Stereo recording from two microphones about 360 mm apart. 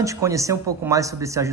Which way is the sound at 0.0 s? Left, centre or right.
Centre.